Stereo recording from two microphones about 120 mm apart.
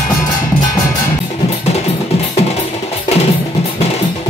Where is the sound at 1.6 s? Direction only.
65° left (ahead or behind).